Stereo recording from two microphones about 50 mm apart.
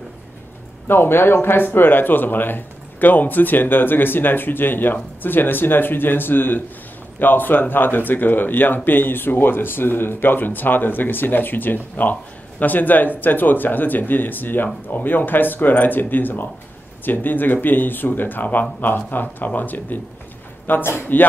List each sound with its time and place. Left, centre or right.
0.8 s speech: left
20.8 s speech: left